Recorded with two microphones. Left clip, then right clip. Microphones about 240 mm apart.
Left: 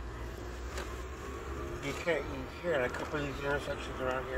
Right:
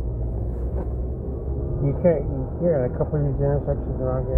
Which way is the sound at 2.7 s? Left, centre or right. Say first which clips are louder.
Right 9 dB; left.